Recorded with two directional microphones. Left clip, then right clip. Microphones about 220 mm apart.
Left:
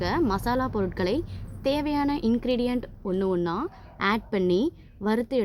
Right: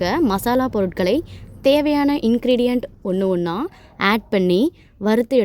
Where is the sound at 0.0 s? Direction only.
35° right (ahead or behind).